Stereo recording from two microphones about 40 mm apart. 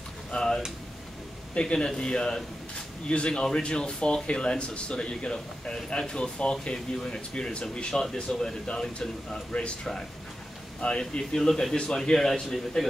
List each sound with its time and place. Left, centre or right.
0.3 s a sound: centre
1.5 s speech: left
7.9 s a man's voice: centre
9.5 s speech: left
10.8 s a man's voice: left; by 12.8 s centre